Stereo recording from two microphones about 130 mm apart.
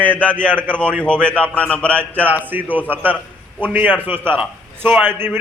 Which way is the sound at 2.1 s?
15° right (ahead or behind).